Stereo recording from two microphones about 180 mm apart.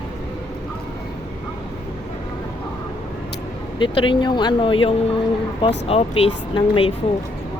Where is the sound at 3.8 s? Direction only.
30° left (ahead or behind).